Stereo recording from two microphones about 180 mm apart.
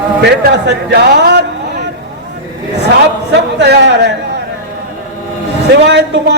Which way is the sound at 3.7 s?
75° right (ahead or behind).